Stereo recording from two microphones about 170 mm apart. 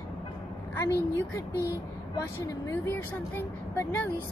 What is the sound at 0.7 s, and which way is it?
Speech, 15° left (ahead or behind).